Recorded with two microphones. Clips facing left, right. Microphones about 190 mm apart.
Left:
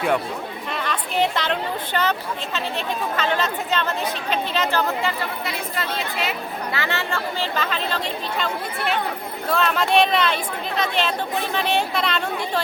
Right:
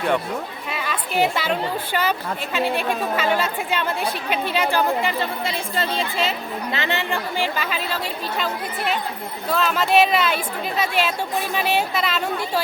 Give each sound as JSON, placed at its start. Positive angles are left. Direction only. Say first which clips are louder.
{"t": 0.7, "sound": "a woman's voice", "louder": "even", "side_deg": -5}
{"t": 5.2, "sound": "a woman's voice", "louder": "right 2 dB", "side_deg": -30}
{"t": 9.5, "sound": "a woman's voice", "louder": "even", "side_deg": 0}